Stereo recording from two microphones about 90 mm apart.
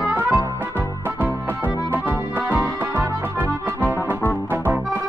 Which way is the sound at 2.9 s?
25° right (ahead or behind).